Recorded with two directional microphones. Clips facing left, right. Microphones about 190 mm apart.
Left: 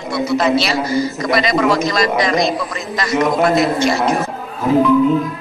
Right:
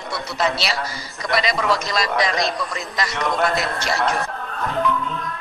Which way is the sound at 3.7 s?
15° left (ahead or behind).